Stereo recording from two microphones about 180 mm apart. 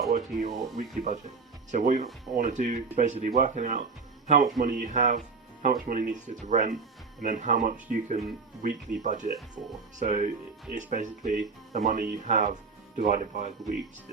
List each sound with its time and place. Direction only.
0.1 s speech: 45° right (ahead or behind)